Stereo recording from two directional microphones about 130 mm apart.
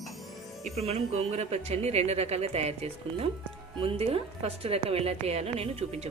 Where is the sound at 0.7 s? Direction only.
55° right (ahead or behind).